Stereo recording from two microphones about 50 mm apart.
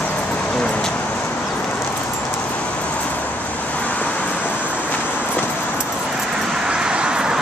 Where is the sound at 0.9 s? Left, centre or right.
Left.